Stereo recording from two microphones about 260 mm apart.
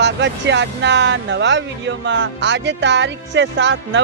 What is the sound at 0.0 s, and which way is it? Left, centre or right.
Speech, right.